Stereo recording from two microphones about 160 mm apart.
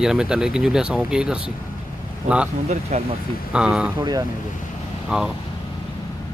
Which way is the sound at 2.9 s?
45° right (ahead or behind).